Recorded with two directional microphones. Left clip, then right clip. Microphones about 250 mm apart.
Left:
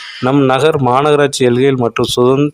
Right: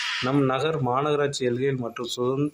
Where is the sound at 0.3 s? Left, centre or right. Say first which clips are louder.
Left 15 dB; left.